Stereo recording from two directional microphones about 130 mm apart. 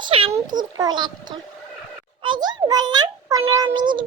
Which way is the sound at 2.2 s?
35° right (ahead or behind).